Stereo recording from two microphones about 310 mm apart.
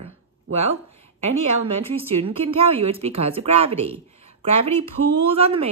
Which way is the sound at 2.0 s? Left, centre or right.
Centre.